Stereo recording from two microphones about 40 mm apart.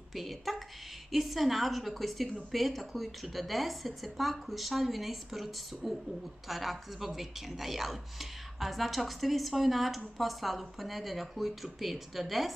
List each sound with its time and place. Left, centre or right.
0.1 s speech: centre